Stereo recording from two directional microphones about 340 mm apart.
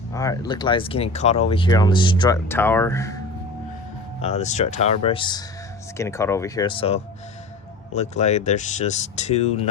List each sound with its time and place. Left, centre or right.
0.1 s speech: centre
4.2 s speech: centre